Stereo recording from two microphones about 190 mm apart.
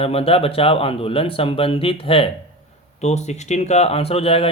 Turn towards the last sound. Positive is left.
turn(degrees=30)  # may be behind; listen again after turning